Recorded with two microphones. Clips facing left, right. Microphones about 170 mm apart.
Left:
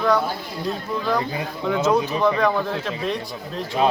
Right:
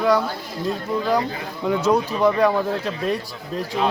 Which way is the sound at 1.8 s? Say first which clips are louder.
Right 1 dB; 10° right (ahead or behind).